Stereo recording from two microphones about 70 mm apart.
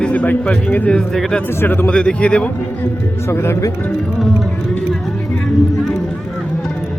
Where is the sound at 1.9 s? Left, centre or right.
Centre.